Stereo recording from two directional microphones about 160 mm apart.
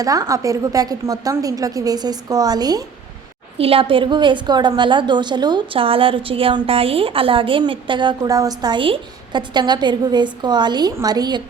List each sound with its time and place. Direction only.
0.0 s a woman's voice: 20° right (ahead or behind)
3.6 s a woman's voice: 35° right (ahead or behind)